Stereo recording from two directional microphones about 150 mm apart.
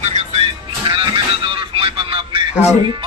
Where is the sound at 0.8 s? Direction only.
35° right (ahead or behind).